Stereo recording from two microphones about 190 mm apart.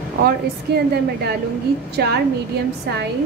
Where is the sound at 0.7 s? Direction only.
60° right (ahead or behind).